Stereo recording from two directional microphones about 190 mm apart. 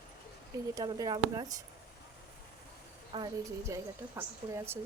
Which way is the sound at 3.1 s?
25° right (ahead or behind).